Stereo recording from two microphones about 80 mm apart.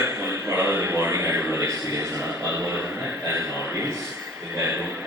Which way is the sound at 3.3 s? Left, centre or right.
Right.